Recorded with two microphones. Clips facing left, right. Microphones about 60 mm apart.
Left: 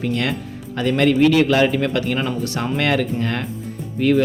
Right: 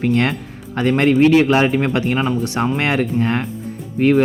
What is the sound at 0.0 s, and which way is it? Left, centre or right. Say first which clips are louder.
Speech: right 4 dB; right.